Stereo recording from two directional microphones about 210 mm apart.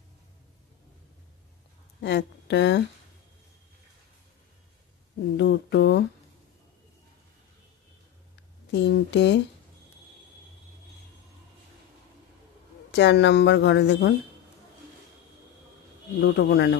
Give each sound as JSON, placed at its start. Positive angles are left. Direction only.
{"t": 2.0, "sound": "speech", "side_deg": 55}
{"t": 5.4, "sound": "speech", "side_deg": 55}
{"t": 8.7, "sound": "speech", "side_deg": 55}
{"t": 12.9, "sound": "speech", "side_deg": 55}
{"t": 16.2, "sound": "speech", "side_deg": 55}